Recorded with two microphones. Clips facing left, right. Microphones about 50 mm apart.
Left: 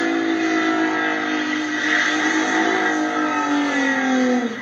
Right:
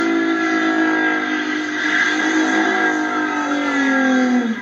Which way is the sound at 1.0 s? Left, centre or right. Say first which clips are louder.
Right 2 dB; centre.